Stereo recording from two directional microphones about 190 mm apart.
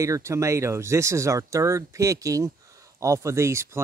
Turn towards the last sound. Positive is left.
turn(degrees=-15)  # may be behind; listen again after turning